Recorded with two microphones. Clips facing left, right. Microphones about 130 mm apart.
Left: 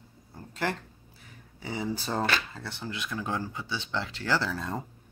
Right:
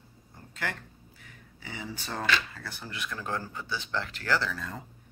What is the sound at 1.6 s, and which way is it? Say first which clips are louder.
Speech: left 7 dB; 35° left (ahead or behind).